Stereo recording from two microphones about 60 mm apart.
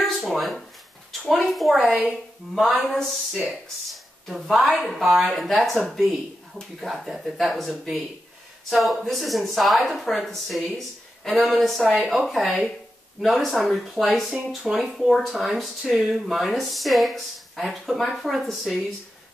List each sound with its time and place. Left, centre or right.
0.0 s speech: centre